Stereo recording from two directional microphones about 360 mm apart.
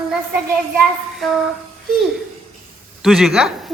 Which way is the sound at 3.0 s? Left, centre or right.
Centre.